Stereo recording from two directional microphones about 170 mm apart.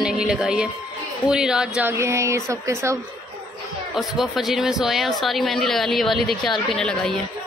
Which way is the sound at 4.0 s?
Centre (ahead or behind).